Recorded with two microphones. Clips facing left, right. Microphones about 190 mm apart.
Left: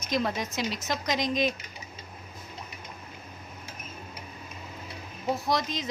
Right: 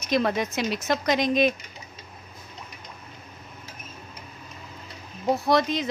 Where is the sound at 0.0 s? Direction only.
65° right (ahead or behind).